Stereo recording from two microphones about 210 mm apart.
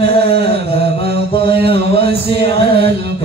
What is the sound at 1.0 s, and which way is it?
Mantra, 25° left (ahead or behind).